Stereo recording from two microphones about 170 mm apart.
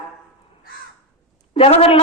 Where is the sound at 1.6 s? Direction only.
35° left (ahead or behind).